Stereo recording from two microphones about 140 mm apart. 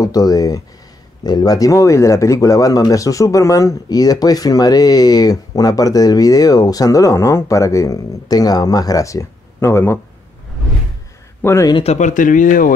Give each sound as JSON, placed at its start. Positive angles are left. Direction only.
{"t": 0.0, "sound": "speech", "side_deg": 25}
{"t": 11.4, "sound": "speech", "side_deg": 20}
{"t": 11.7, "sound": "speech", "side_deg": 50}